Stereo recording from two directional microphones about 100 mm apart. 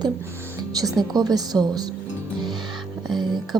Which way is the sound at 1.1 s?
40° right (ahead or behind).